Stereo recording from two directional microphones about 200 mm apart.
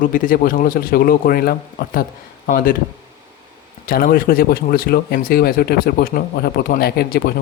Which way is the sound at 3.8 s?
45° left (ahead or behind).